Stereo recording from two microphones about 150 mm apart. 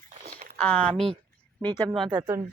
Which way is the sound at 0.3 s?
55° right (ahead or behind).